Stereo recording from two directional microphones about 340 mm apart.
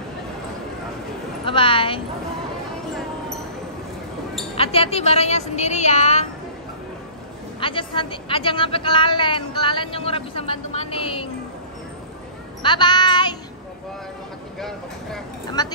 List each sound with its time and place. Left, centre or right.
1.4 s a woman's voice: centre
4.6 s a woman's voice: centre
7.6 s a woman's voice: centre
12.6 s a woman's voice: centre
15.6 s a woman's voice: centre